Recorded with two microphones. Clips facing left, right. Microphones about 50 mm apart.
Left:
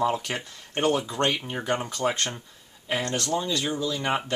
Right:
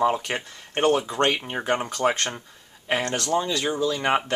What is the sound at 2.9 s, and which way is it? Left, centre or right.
Speech, right.